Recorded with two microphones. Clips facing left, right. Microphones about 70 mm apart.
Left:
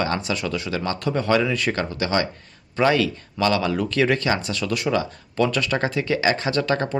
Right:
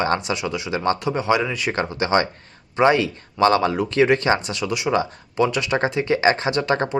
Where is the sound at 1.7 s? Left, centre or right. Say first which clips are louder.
Right 2 dB; right.